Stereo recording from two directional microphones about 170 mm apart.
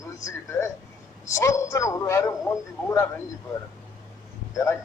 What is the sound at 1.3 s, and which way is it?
A man's voice, 15° left (ahead or behind).